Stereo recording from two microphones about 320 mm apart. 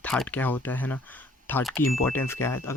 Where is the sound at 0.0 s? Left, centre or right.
Centre.